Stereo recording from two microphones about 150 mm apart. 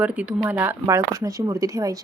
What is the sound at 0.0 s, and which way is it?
Speech, 10° right (ahead or behind).